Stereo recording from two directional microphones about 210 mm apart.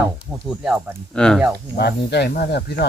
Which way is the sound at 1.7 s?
50° left (ahead or behind).